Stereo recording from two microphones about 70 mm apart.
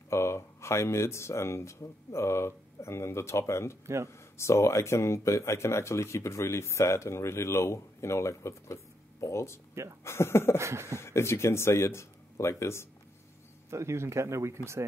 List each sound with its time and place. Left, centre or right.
0.1 s speech: left
3.8 s speech: right
4.1 s speech: left
10.6 s speech: right
11.0 s speech: left
13.7 s speech: right